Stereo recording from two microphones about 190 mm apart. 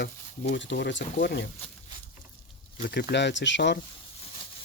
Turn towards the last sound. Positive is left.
turn(degrees=65)  # may be behind; listen again after turning